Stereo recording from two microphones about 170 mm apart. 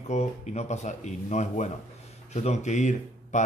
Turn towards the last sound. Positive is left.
turn(degrees=45)  # may be behind; listen again after turning